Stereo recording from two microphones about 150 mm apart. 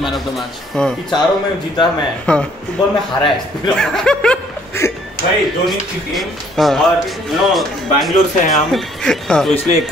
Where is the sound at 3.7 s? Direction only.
5° left (ahead or behind).